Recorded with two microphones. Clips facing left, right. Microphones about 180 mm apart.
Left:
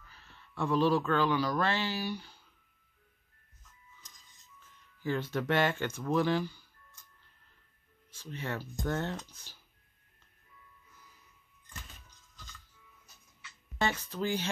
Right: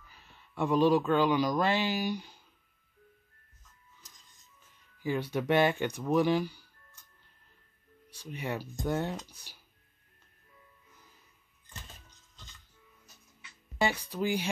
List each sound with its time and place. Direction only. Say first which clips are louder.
0.1 s speech: right 2 dB; 15° right (ahead or behind)
5.0 s speech: right 2 dB; 15° right (ahead or behind)
8.1 s speech: right 2 dB; 15° right (ahead or behind)
13.7 s speech: right 2 dB; 15° right (ahead or behind)